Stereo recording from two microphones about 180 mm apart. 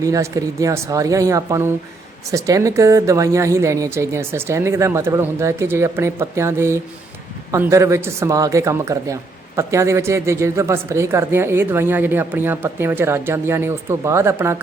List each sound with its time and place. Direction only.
0.0 s a woman's voice: 20° right (ahead or behind)